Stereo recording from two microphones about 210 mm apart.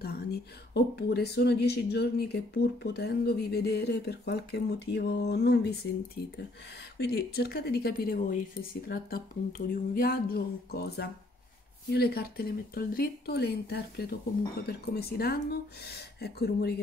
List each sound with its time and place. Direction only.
0.0 s a woman's voice: 50° left (ahead or behind)
7.0 s a woman's voice: 50° left (ahead or behind)